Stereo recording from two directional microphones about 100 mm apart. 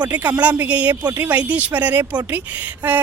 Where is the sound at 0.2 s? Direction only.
15° right (ahead or behind).